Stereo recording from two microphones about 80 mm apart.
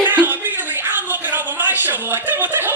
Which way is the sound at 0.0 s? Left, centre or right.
Right.